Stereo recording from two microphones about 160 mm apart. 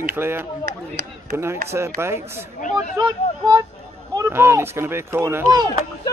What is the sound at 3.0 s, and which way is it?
Speech, 25° right (ahead or behind).